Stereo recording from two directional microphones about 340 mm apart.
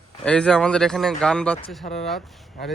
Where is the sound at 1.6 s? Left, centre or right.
Centre.